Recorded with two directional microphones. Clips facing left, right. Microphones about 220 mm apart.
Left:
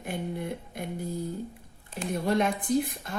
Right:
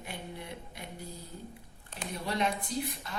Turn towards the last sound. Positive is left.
turn(degrees=50)  # may be behind; listen again after turning